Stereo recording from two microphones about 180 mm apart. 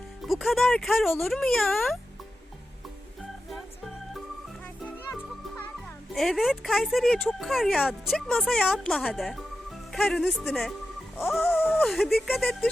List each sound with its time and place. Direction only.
0.2 s speech: centre (ahead or behind)
3.5 s music: centre (ahead or behind)
6.1 s speech: centre (ahead or behind)